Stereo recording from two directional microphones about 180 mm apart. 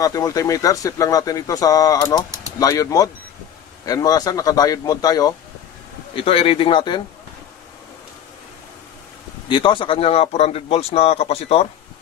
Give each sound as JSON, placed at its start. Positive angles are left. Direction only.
{"t": 0.0, "sound": "speech", "side_deg": 20}
{"t": 6.1, "sound": "speech", "side_deg": 30}
{"t": 9.5, "sound": "a man's voice", "side_deg": 25}